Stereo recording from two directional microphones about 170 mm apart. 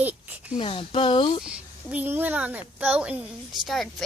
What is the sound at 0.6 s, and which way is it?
Speech, 30° left (ahead or behind).